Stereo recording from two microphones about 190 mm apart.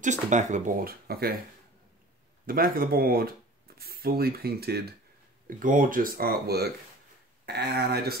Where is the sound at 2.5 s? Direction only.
50° right (ahead or behind).